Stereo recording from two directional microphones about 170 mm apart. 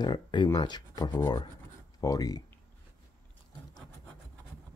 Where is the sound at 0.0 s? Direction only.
25° left (ahead or behind).